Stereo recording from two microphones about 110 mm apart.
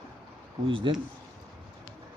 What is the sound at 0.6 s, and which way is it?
Speech, 50° right (ahead or behind).